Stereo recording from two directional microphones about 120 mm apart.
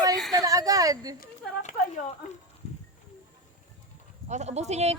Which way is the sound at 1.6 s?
75° left (ahead or behind).